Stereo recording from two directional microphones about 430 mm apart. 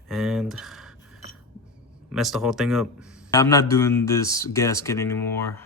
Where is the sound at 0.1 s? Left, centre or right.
Centre.